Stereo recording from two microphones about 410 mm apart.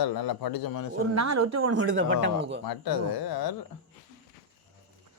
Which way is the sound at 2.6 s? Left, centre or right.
Left.